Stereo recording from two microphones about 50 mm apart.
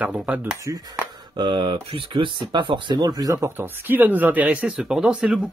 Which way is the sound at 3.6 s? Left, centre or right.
Right.